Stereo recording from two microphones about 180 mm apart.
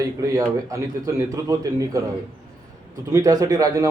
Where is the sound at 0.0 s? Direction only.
20° right (ahead or behind).